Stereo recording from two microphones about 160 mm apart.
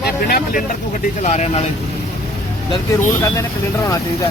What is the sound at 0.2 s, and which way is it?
Speech, 65° left (ahead or behind).